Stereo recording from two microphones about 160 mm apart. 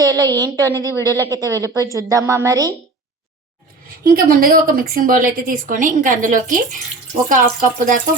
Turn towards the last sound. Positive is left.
turn(degrees=-55)  # may be behind; listen again after turning